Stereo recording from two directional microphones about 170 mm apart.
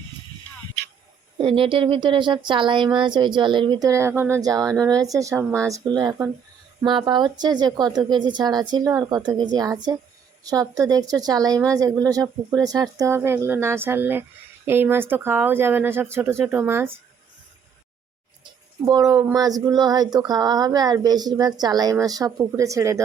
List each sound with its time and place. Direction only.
1.4 s a woman's voice: 30° right (ahead or behind); by 17.0 s 15° right (ahead or behind)
18.9 s a woman's voice: 20° right (ahead or behind)